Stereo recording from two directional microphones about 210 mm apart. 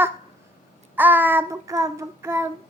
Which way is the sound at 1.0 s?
10° right (ahead or behind).